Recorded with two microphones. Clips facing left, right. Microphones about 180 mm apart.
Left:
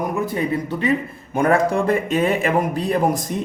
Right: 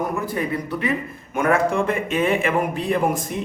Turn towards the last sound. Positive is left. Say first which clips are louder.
# left 2 dB
turn(degrees=40)  # may be behind; listen again after turning